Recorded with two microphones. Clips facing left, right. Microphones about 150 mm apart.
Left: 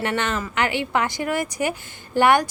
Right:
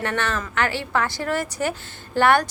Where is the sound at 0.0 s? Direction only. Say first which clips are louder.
Left 1 dB; 15° left (ahead or behind).